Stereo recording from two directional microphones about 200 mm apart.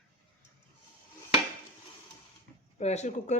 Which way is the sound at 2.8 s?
35° left (ahead or behind).